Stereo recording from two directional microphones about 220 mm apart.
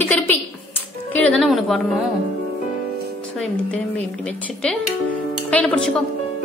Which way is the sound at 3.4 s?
5° left (ahead or behind).